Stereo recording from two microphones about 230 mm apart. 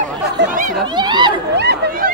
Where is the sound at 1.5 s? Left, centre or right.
Right.